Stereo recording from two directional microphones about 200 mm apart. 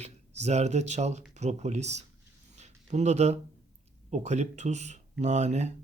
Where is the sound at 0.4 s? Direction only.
35° right (ahead or behind).